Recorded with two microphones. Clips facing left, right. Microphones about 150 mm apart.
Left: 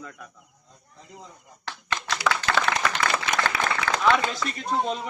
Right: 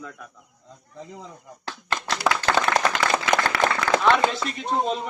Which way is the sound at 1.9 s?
50° right (ahead or behind).